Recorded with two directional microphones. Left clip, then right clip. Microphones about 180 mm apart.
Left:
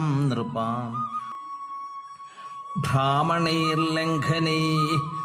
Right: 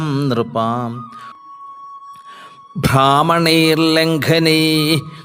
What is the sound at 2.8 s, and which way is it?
Mantra, 40° right (ahead or behind).